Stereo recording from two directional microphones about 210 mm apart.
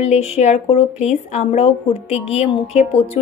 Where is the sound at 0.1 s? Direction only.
30° left (ahead or behind).